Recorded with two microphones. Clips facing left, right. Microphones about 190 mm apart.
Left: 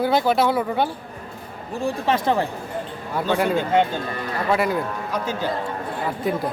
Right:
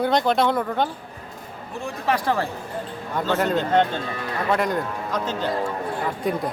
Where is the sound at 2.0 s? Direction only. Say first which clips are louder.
Even; 25° left (ahead or behind).